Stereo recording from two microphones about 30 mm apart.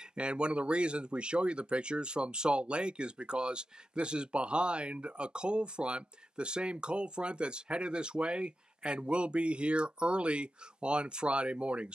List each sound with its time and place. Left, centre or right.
0.1 s speech: right